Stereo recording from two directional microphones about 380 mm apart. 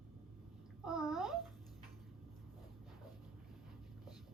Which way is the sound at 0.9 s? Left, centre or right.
Centre.